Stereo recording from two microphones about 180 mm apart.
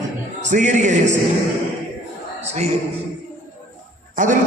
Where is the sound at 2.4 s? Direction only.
35° right (ahead or behind).